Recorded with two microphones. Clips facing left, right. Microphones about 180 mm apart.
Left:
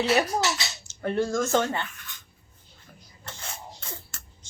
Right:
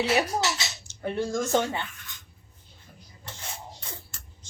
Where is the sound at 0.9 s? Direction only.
15° right (ahead or behind).